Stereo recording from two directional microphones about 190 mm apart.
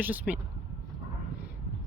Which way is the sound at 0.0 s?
10° right (ahead or behind).